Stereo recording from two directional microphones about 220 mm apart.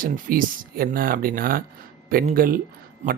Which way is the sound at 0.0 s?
40° right (ahead or behind).